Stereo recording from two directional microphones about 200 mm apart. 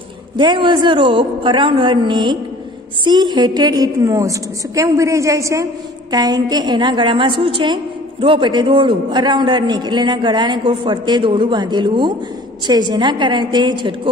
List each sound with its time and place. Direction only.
0.4 s a woman's voice: 25° right (ahead or behind)